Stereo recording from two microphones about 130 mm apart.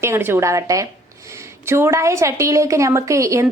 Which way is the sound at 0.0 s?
20° right (ahead or behind).